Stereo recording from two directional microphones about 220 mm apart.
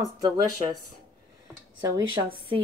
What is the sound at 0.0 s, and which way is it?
Speech, 15° right (ahead or behind).